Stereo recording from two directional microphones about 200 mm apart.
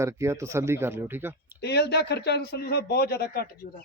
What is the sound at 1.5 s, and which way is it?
Speech, 55° left (ahead or behind).